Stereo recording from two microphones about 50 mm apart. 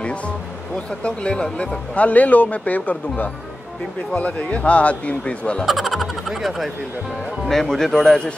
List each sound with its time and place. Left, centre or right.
0.7 s speech: left
5.7 s speech: centre
7.4 s speech: centre